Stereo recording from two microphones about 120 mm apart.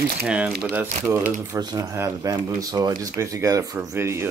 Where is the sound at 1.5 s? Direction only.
30° right (ahead or behind).